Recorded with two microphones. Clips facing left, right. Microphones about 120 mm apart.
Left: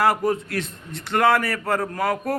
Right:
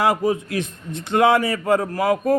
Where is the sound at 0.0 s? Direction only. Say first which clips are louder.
Right 1 dB; 15° right (ahead or behind).